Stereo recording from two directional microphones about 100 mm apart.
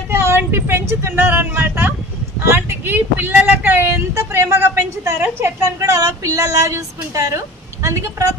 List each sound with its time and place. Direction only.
0.1 s vehicle: 25° right (ahead or behind)
2.4 s speech: 25° right (ahead or behind)